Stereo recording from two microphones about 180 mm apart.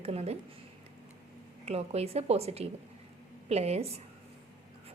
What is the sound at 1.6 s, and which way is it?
A woman's voice, 35° right (ahead or behind).